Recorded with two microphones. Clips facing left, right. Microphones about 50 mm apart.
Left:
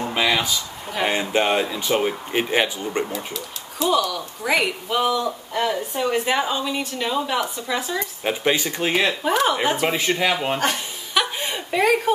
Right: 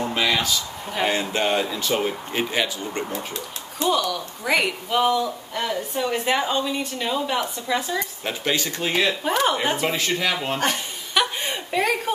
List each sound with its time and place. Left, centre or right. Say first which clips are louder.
0.0 s a sound: left 1 dB; centre
1.0 s speech: left 2 dB; centre
2.5 s speech: left 4 dB; left
4.1 s speech: left 1 dB; centre
8.2 s speech: left 4 dB; centre
9.2 s speech: left 2 dB; centre
9.9 s speech: left 3 dB; centre
10.6 s chuckle: left 1 dB; centre